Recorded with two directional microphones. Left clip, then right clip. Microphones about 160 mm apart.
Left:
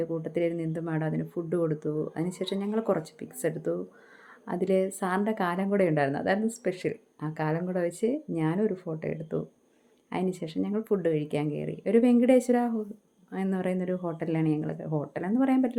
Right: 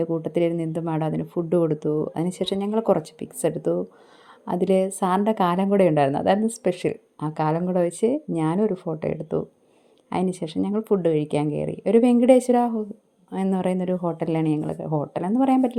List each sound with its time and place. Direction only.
0.2 s a woman's voice: 40° right (ahead or behind)